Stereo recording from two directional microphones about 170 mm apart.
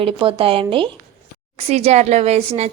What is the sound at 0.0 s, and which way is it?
A woman's voice, 30° right (ahead or behind).